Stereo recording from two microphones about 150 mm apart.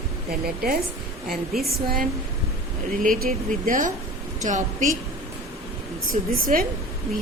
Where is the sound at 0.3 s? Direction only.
90° right.